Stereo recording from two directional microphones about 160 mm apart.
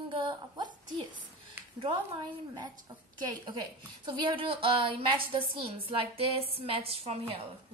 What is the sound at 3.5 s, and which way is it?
A woman's voice, 30° right (ahead or behind).